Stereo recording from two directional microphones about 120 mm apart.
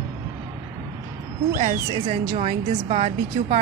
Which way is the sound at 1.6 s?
60° right (ahead or behind).